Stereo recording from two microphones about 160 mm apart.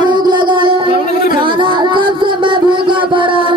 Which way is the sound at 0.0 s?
30° right (ahead or behind).